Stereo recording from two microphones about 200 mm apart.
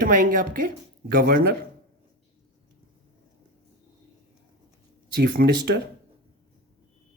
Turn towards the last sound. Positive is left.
turn(degrees=-55)  # may be behind; listen again after turning